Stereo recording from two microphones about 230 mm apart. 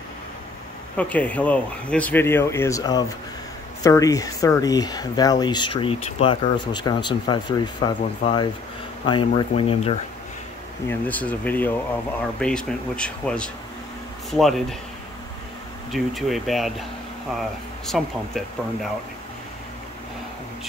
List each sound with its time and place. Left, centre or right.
0.9 s speech: centre; by 9.9 s left
10.9 s speech: centre
15.9 s speech: centre